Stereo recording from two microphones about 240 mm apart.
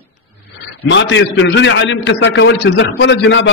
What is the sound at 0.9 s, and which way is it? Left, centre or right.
A man's voice, left.